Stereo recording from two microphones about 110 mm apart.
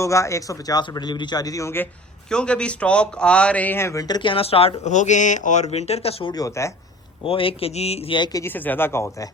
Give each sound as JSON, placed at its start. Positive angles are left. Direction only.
{"t": 0.0, "sound": "a man's voice", "side_deg": 30}
{"t": 2.3, "sound": "a man's voice", "side_deg": 10}
{"t": 6.3, "sound": "speech", "side_deg": 30}
{"t": 7.3, "sound": "speech", "side_deg": 55}
{"t": 7.7, "sound": "speech", "side_deg": 70}
{"t": 8.1, "sound": "a man's voice", "side_deg": 45}
{"t": 8.4, "sound": "speech", "side_deg": 20}